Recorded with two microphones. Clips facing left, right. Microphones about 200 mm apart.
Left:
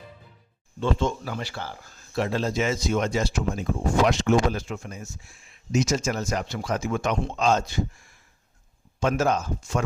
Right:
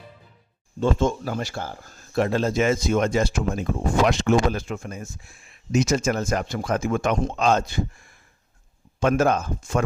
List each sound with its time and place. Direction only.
0.8 s speech: 45° right (ahead or behind)